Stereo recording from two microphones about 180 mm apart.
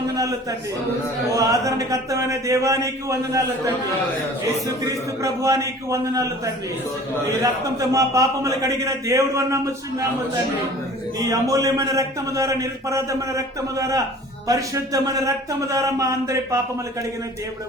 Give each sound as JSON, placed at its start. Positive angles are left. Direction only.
{"t": 1.3, "sound": "a man's voice", "side_deg": -20}
{"t": 4.9, "sound": "a man's voice", "side_deg": -15}
{"t": 11.2, "sound": "a man's voice", "side_deg": -20}